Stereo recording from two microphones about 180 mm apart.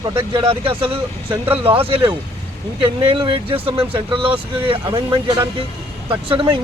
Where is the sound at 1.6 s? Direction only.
30° right (ahead or behind).